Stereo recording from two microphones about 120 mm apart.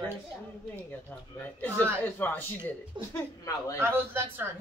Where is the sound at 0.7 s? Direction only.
15° left (ahead or behind).